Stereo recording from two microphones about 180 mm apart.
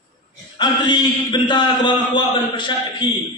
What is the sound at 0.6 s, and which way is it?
A man's voice, 25° left (ahead or behind).